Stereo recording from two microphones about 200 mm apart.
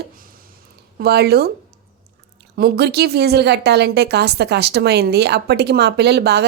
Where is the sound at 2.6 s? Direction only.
55° right (ahead or behind).